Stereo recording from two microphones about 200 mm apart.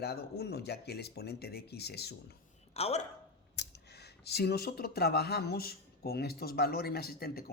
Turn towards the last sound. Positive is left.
turn(degrees=50)  # may be behind; listen again after turning